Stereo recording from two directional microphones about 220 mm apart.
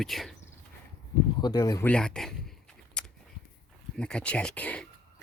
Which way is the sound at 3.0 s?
5° left (ahead or behind).